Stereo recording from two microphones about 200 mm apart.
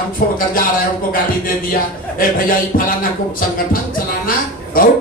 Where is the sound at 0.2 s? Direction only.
45° left (ahead or behind).